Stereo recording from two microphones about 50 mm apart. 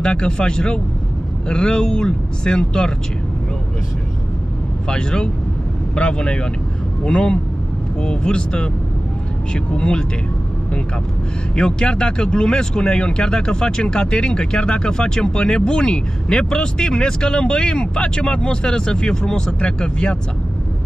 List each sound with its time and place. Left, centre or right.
0.0 s speech: centre
4.8 s speech: centre
11.5 s speech: centre